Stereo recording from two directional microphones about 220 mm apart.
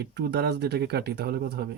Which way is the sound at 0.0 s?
50° right (ahead or behind).